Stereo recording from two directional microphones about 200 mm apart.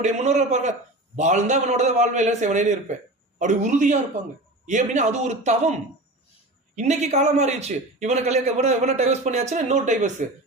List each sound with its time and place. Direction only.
0.0 s a man's voice: 35° right (ahead or behind)
6.7 s a man's voice: 35° right (ahead or behind)